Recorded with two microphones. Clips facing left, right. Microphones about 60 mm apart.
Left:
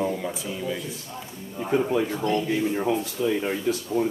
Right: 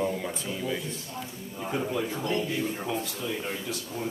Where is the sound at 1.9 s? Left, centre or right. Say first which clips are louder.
Left 5 dB; left.